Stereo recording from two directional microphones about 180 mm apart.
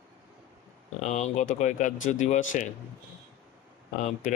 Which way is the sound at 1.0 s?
40° left (ahead or behind).